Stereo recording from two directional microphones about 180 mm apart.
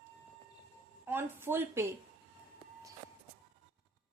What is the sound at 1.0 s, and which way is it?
Speech, 10° right (ahead or behind).